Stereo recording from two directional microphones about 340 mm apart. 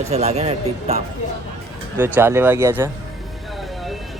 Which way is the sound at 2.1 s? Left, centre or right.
Centre.